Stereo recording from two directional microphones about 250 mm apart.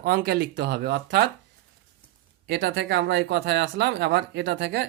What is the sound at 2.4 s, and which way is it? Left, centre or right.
Speech, right.